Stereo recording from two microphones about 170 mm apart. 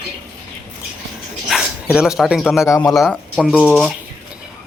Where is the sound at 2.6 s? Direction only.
15° left (ahead or behind).